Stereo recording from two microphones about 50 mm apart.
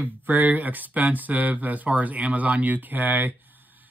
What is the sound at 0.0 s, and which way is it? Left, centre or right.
Speech, right.